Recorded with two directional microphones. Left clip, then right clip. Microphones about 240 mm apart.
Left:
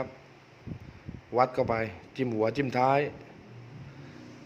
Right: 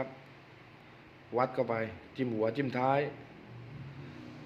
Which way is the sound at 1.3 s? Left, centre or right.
Left.